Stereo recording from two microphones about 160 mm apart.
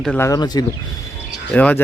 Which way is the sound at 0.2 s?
25° left (ahead or behind).